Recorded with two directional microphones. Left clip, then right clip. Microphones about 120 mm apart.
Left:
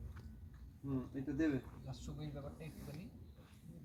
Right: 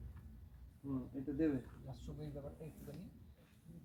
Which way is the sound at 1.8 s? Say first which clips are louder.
Left 1 dB; centre (ahead or behind).